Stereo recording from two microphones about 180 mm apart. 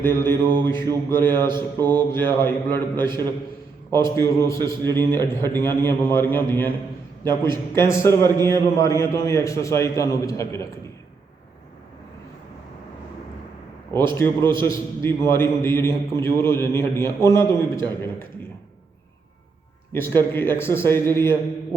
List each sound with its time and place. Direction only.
0.0 s a man's voice: 15° left (ahead or behind)
14.1 s a man's voice: 15° left (ahead or behind)
19.9 s a man's voice: 10° left (ahead or behind)